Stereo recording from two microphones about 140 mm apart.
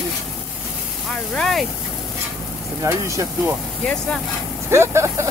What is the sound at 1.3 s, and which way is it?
Speech, centre (ahead or behind).